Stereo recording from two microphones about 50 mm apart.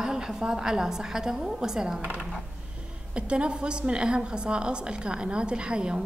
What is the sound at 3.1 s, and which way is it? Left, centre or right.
A woman's voice, right.